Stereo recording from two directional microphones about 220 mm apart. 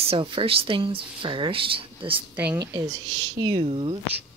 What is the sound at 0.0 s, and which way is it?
Speech, 25° right (ahead or behind).